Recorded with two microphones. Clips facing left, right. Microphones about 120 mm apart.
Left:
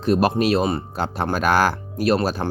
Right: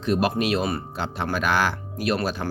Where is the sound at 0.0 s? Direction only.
40° left (ahead or behind).